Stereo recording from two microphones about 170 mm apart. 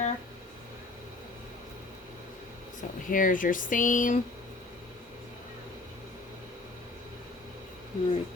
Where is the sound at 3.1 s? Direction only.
50° left (ahead or behind).